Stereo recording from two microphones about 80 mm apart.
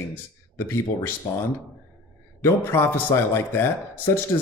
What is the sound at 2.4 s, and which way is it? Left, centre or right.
Speech, left.